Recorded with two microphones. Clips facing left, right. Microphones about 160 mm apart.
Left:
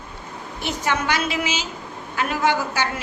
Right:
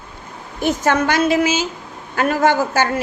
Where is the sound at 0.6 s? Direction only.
45° right (ahead or behind).